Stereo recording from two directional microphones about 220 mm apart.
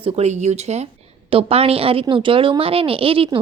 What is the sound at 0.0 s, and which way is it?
A woman's voice, 30° right (ahead or behind).